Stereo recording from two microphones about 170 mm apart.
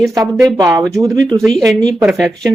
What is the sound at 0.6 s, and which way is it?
Speech, 20° right (ahead or behind).